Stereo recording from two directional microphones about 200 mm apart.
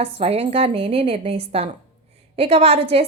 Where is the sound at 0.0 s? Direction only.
30° right (ahead or behind).